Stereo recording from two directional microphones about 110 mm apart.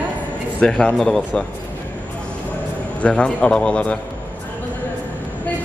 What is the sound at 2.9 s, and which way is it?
A man's voice, 10° left (ahead or behind).